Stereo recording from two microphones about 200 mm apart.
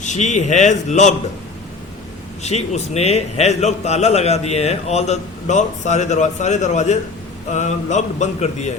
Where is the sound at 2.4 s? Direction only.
35° left (ahead or behind).